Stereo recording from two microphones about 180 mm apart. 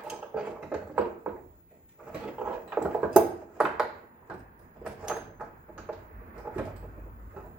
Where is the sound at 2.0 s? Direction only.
5° right (ahead or behind).